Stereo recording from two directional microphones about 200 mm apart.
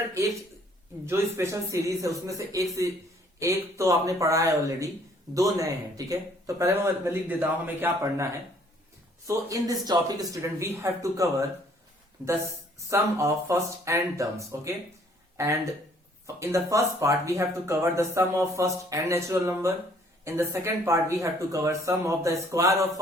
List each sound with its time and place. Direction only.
1.0 s speech: 10° right (ahead or behind)
12.9 s speech: 15° right (ahead or behind)